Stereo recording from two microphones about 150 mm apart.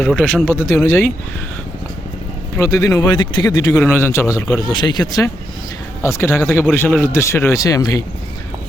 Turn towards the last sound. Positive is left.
turn(degrees=20)  # may be behind; listen again after turning